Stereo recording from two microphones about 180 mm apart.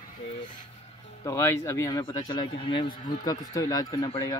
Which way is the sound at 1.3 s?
15° left (ahead or behind).